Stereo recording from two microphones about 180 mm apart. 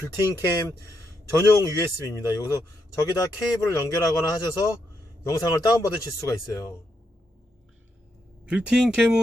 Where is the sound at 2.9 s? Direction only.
20° left (ahead or behind).